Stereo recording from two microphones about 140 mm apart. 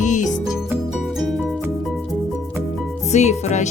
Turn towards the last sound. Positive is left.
turn(degrees=55)  # may be behind; listen again after turning